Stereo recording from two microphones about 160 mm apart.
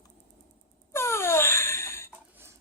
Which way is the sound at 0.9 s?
15° left (ahead or behind).